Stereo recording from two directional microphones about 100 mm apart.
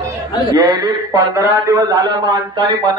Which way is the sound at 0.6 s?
35° right (ahead or behind).